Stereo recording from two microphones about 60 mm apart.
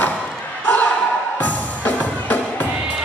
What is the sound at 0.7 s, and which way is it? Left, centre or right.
Ping, left.